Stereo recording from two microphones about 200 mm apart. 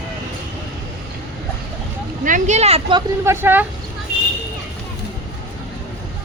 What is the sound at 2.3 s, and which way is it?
Speech, 40° right (ahead or behind).